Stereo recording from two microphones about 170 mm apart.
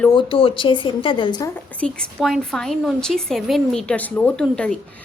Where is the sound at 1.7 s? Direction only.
5° left (ahead or behind).